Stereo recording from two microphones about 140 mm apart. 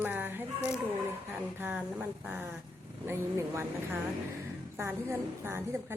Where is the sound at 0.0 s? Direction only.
15° right (ahead or behind).